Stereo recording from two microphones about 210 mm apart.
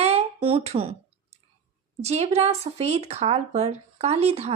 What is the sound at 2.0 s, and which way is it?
Speech, 30° right (ahead or behind).